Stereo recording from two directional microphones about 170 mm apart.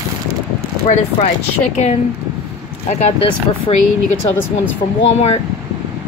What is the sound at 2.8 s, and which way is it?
Speech, 40° left (ahead or behind).